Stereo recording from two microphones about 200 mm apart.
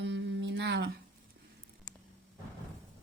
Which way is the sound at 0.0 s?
60° right (ahead or behind).